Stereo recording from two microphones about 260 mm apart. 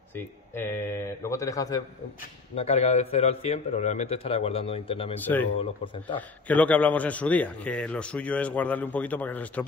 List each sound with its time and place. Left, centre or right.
0.1 s a man's voice: centre
2.5 s a man's voice: left
5.2 s a man's voice: centre